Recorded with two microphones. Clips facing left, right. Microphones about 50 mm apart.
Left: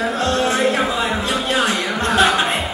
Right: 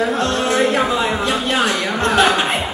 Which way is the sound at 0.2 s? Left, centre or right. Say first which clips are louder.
Right 1 dB; right.